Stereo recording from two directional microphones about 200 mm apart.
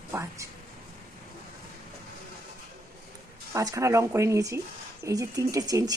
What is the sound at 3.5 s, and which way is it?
Speech, 15° right (ahead or behind).